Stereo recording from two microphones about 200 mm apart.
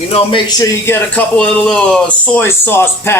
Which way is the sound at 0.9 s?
5° left (ahead or behind).